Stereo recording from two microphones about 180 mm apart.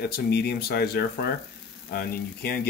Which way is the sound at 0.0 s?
65° left (ahead or behind).